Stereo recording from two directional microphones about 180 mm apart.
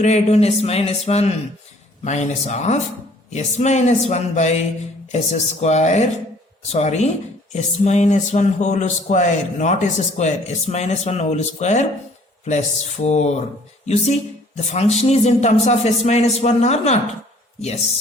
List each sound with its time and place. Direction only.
0.0 s speech: 35° left (ahead or behind)